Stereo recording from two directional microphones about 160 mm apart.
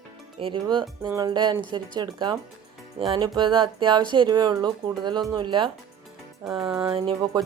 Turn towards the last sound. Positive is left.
turn(degrees=-30)  # may be behind; listen again after turning